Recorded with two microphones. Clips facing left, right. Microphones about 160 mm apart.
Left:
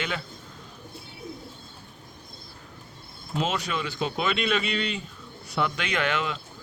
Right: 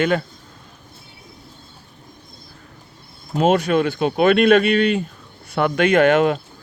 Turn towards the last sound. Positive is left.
turn(degrees=-50)  # may be behind; listen again after turning